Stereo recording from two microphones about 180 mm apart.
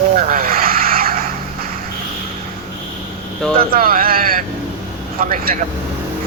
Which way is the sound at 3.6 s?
55° right (ahead or behind).